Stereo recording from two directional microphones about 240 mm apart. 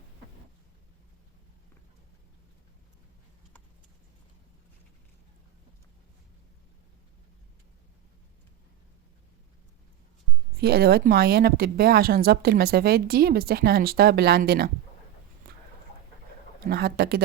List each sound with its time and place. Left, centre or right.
10.6 s speech: right
16.6 s speech: right